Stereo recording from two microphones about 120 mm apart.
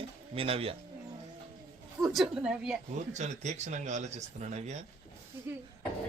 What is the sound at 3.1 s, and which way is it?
Speech, 70° right (ahead or behind).